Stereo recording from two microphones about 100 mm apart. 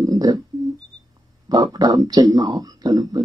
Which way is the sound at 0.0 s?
45° right (ahead or behind).